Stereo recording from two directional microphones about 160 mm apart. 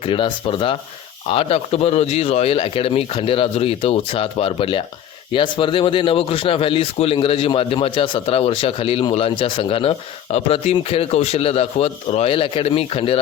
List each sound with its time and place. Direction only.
0.0 s speech: 30° left (ahead or behind)